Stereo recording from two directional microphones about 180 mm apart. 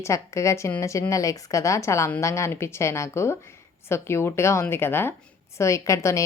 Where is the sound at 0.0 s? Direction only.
15° left (ahead or behind).